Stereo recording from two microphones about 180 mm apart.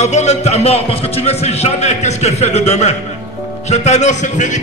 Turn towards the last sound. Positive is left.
turn(degrees=40)  # may be behind; listen again after turning